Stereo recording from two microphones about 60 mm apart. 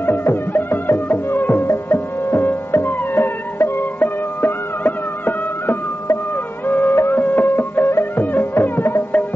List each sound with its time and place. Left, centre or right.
0.0 s music: left